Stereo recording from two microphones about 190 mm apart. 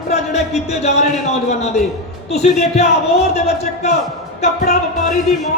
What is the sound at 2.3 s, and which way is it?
Speech, 35° left (ahead or behind).